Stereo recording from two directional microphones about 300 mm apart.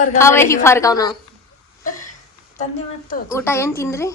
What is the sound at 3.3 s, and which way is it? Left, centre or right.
Speech, centre.